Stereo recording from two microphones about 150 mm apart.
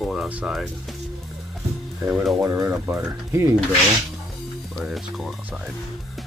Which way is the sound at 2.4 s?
20° right (ahead or behind).